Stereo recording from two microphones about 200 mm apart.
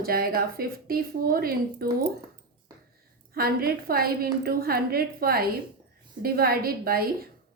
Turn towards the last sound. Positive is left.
turn(degrees=-50)  # may be behind; listen again after turning